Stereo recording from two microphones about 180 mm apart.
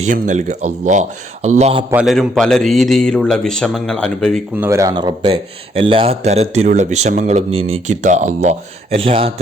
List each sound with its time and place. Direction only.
0.0 s speech: 40° right (ahead or behind)
1.9 s a man's voice: 5° right (ahead or behind)
4.5 s speech: 15° right (ahead or behind); by 9.3 s 30° right (ahead or behind)